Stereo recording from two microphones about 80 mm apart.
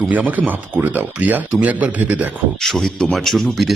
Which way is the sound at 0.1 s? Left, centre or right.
Right.